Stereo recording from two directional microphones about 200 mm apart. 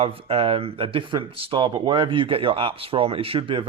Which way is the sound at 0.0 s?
30° right (ahead or behind).